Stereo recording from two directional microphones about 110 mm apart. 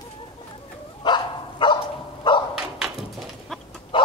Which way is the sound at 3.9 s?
50° left (ahead or behind).